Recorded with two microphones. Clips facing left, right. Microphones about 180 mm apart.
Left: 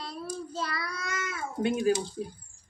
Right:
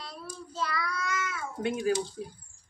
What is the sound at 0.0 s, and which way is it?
Child singing, 35° left (ahead or behind).